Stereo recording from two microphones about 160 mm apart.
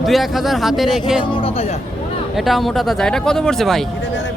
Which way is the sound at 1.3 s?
35° left (ahead or behind).